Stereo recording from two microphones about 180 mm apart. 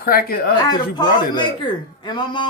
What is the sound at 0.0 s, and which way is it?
Speech, 55° left (ahead or behind).